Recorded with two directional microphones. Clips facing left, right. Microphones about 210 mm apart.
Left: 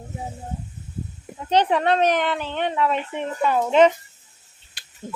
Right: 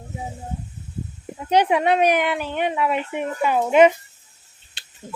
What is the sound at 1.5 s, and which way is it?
A woman's voice, 10° right (ahead or behind).